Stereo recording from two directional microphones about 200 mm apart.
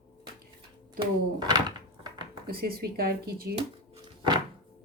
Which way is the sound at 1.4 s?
20° right (ahead or behind).